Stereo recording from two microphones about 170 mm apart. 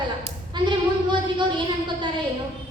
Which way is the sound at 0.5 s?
25° right (ahead or behind).